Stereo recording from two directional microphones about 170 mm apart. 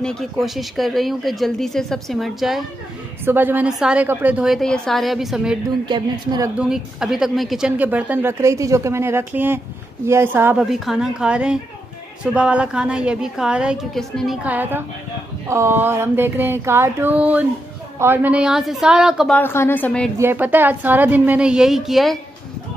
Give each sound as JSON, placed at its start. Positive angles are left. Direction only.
{"t": 0.0, "sound": "speech", "side_deg": 0}
{"t": 3.3, "sound": "speech", "side_deg": -10}
{"t": 5.9, "sound": "speech", "side_deg": -25}
{"t": 6.6, "sound": "speech", "side_deg": -5}
{"t": 19.3, "sound": "a woman's voice", "side_deg": 15}
{"t": 20.2, "sound": "speech", "side_deg": -10}